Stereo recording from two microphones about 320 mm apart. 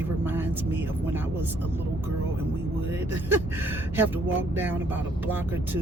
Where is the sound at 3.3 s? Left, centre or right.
Centre.